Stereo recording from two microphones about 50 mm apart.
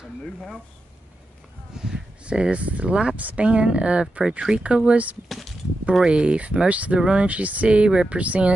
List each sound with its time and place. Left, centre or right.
1.8 s speech: centre